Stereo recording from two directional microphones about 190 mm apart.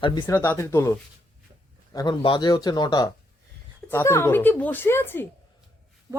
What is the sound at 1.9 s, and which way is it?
A woman's voice, 25° left (ahead or behind).